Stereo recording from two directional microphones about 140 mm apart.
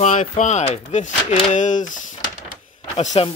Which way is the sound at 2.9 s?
50° left (ahead or behind).